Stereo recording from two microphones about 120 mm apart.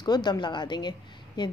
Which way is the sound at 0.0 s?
35° left (ahead or behind).